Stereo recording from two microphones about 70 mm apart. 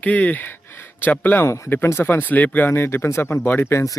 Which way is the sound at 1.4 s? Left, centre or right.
Left.